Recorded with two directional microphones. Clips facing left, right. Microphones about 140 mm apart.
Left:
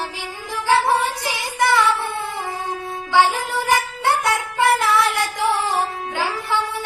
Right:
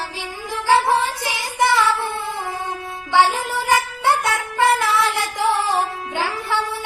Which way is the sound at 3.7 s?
20° right (ahead or behind).